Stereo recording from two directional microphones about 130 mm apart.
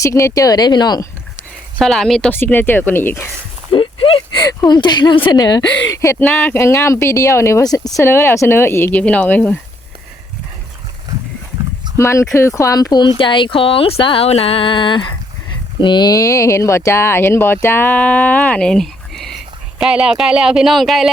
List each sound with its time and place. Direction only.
0.0 s speech: 25° left (ahead or behind)
1.8 s speech: centre (ahead or behind)
2.3 s speech: 15° left (ahead or behind)
3.7 s speech: 40° left (ahead or behind); by 9.6 s 15° left (ahead or behind)
11.9 s speech: 20° left (ahead or behind); by 21.1 s centre (ahead or behind)